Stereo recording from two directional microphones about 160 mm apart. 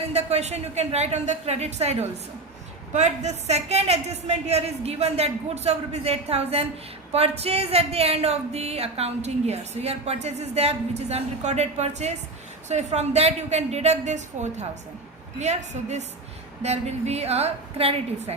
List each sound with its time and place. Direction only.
0.1 s a woman's voice: 40° right (ahead or behind)